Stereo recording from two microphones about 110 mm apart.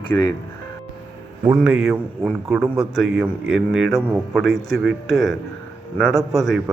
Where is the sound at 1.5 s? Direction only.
5° right (ahead or behind).